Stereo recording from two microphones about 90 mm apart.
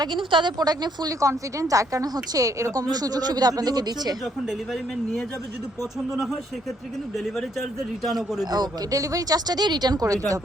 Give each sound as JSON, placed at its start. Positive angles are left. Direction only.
{"t": 0.0, "sound": "speech", "side_deg": -65}
{"t": 0.6, "sound": "speech", "side_deg": -45}
{"t": 8.0, "sound": "speech", "side_deg": -5}
{"t": 8.4, "sound": "speech", "side_deg": -50}